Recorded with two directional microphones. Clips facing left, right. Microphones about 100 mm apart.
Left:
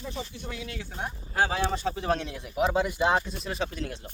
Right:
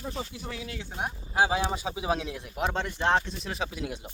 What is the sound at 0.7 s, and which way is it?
Speech, 20° right (ahead or behind).